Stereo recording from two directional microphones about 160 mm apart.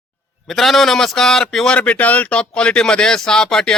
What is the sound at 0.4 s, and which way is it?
A man's voice, centre (ahead or behind).